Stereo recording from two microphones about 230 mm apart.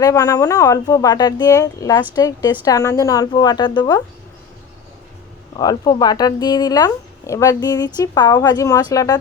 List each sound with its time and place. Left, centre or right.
0.0 s speech: centre
5.5 s speech: centre